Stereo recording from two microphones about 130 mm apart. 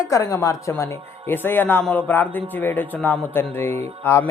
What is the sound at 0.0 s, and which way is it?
A woman's voice, 25° left (ahead or behind).